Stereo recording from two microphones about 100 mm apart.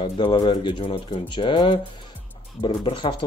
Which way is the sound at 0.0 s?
50° left (ahead or behind).